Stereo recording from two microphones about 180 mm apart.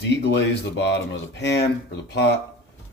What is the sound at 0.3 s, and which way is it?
Speech, 70° left (ahead or behind).